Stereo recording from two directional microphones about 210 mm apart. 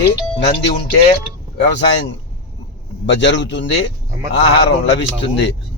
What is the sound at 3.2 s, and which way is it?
Speech, 55° left (ahead or behind).